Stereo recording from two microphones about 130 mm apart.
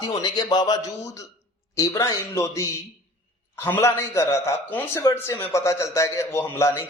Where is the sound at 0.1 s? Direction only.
30° left (ahead or behind).